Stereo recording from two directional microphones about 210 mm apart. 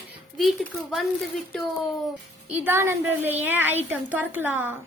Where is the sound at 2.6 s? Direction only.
10° right (ahead or behind).